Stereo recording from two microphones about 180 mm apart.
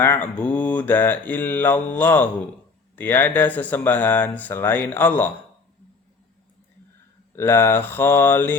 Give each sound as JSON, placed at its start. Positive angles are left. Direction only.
{"t": 0.0, "sound": "speech", "side_deg": 10}
{"t": 7.3, "sound": "speech", "side_deg": 15}